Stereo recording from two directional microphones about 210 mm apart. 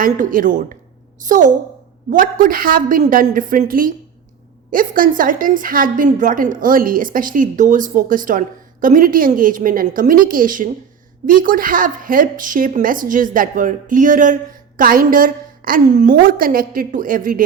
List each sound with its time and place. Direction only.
0.0 s a woman's voice: 40° right (ahead or behind)